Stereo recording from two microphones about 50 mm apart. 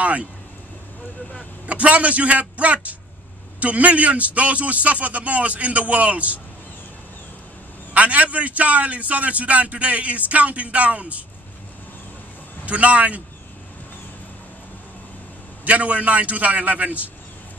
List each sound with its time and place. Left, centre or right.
0.0 s vehicle: right
1.7 s a man's voice: right
7.9 s a man's voice: right
12.6 s a man's voice: right
15.6 s a man's voice: right